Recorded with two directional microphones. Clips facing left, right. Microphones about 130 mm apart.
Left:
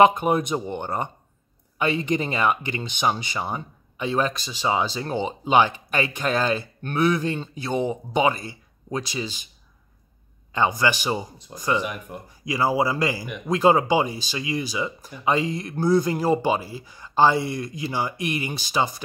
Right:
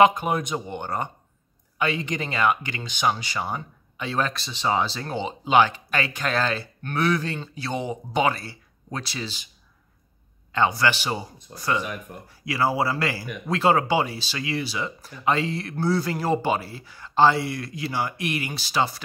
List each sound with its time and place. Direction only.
0.0 s speech: 25° left (ahead or behind)
10.5 s speech: 15° left (ahead or behind)